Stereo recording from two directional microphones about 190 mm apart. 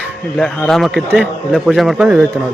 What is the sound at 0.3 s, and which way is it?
A man's voice, 5° left (ahead or behind).